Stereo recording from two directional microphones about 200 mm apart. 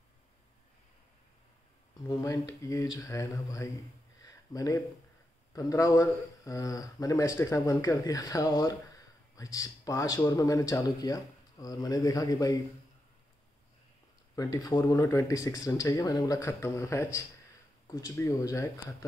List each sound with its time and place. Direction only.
2.0 s a man's voice: 15° left (ahead or behind)
14.3 s a man's voice: 15° left (ahead or behind)